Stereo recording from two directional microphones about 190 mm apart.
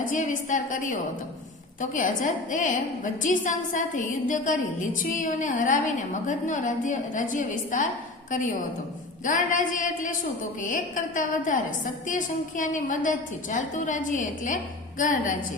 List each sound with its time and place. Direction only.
0.0 s a woman's voice: 40° left (ahead or behind)
9.2 s a woman's voice: 45° left (ahead or behind)